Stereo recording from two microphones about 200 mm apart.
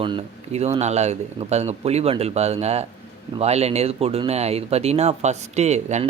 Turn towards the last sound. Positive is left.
turn(degrees=-35)  # may be behind; listen again after turning